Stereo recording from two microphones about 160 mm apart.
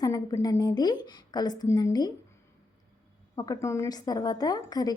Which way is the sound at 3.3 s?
25° left (ahead or behind).